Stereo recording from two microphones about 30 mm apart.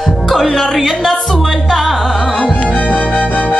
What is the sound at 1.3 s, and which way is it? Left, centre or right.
Music, centre.